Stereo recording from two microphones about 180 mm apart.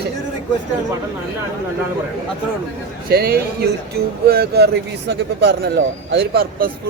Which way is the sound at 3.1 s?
60° right (ahead or behind).